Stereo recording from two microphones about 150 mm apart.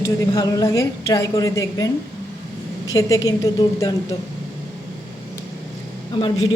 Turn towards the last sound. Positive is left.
turn(degrees=35)  # may be behind; listen again after turning